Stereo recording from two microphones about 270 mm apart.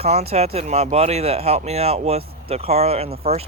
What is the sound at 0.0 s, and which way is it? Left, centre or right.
Speech, right.